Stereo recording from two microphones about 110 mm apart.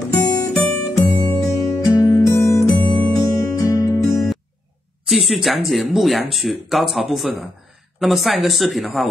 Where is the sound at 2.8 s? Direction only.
15° left (ahead or behind).